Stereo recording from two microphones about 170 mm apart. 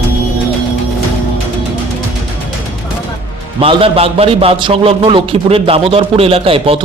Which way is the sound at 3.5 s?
35° right (ahead or behind).